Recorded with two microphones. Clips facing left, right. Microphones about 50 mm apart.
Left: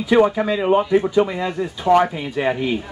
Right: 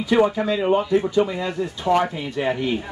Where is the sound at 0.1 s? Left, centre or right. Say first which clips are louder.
Left 3 dB; centre.